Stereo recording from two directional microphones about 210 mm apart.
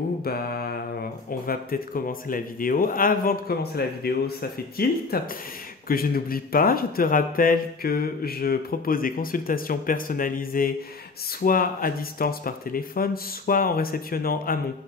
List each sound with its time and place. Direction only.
0.2 s mantra: 45° left (ahead or behind)
1.4 s speech: 45° left (ahead or behind)